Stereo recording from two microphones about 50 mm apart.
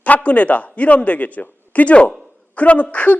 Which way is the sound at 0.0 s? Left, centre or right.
Left.